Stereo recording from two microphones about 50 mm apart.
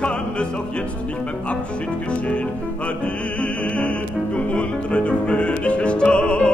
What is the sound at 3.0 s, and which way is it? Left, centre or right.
Opera, left.